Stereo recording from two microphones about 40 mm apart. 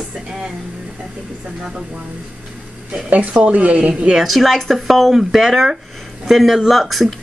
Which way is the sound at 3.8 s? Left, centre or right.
Right.